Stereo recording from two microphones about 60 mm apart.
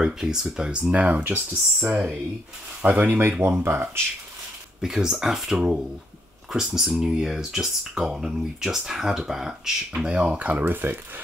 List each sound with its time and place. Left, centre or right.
0.0 s speech: centre
3.1 s speech: right
4.8 s speech: centre
9.9 s speech: centre